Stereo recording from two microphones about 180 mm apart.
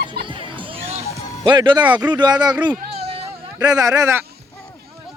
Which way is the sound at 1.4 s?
25° right (ahead or behind).